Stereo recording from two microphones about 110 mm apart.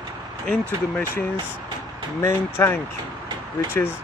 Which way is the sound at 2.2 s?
25° left (ahead or behind).